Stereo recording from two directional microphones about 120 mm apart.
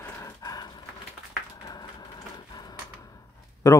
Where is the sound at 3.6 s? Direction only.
25° left (ahead or behind).